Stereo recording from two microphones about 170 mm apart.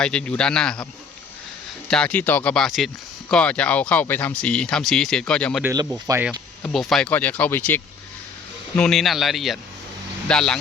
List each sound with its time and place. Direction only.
0.0 s speech: 5° left (ahead or behind)
1.9 s speech: 5° left (ahead or behind)
6.1 s speech: 20° right (ahead or behind)
6.6 s speech: centre (ahead or behind)